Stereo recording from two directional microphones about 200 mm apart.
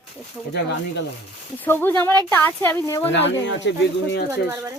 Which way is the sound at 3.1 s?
60° left (ahead or behind).